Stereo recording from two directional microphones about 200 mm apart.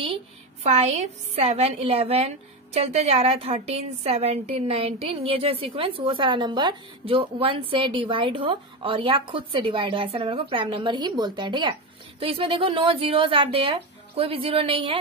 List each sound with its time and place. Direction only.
0.7 s a woman's voice: 30° right (ahead or behind)